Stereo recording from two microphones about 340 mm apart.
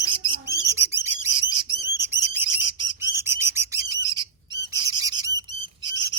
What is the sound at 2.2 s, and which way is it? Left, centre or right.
Bird, centre.